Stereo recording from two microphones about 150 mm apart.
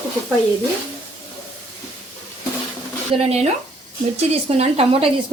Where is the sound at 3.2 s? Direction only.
45° right (ahead or behind).